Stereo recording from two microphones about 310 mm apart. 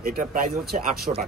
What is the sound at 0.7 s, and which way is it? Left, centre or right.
Speech, right.